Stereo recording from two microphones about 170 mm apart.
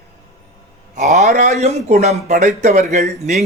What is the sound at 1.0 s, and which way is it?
Speech, 40° right (ahead or behind).